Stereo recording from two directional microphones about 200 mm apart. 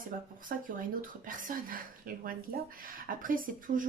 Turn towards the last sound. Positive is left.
turn(degrees=-40)  # may be behind; listen again after turning